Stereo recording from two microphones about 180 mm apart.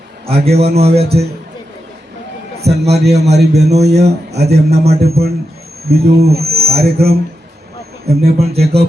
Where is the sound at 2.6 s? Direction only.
35° right (ahead or behind).